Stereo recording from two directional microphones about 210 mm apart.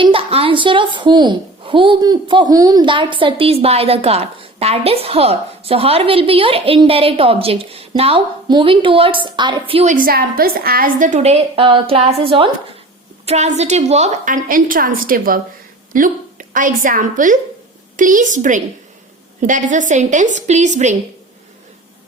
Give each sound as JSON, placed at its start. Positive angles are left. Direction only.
{"t": 0.0, "sound": "a woman's voice", "side_deg": -25}
{"t": 9.9, "sound": "a woman's voice", "side_deg": -45}